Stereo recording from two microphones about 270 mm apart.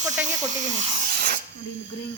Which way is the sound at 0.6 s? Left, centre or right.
Right.